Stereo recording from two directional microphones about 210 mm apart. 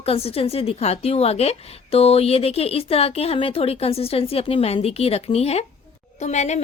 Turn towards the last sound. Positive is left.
turn(degrees=35)  # may be behind; listen again after turning